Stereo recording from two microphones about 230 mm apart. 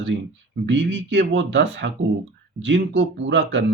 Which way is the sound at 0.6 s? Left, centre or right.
Right.